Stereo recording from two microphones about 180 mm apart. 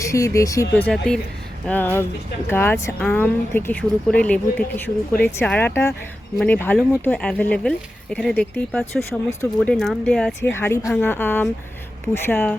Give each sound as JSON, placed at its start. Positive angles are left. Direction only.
{"t": 0.0, "sound": "speech", "side_deg": 15}